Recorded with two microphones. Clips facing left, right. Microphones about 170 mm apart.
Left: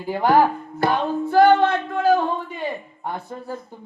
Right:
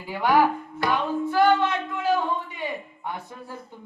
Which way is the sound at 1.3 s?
55° left (ahead or behind).